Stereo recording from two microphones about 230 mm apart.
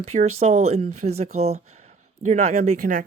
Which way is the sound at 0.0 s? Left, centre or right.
Right.